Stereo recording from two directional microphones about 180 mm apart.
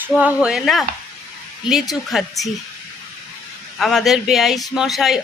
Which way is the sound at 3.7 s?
Centre (ahead or behind).